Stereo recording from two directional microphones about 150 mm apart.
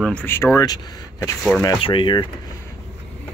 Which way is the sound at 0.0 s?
10° left (ahead or behind).